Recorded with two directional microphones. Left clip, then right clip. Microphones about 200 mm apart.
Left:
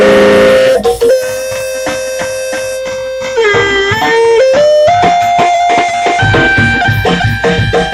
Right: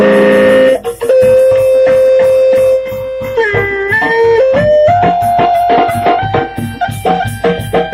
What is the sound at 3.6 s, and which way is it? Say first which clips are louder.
Music: left 2 dB; 40° left (ahead or behind).